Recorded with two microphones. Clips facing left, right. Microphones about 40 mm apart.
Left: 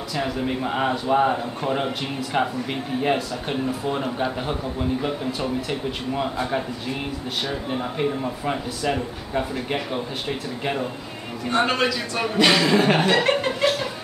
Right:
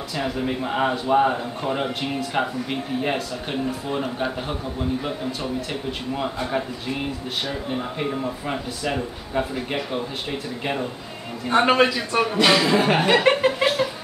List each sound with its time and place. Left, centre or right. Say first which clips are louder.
0.1 s a man's voice: even; centre
11.6 s a man's voice: right 5 dB; centre
12.4 s chuckle: left 1 dB; centre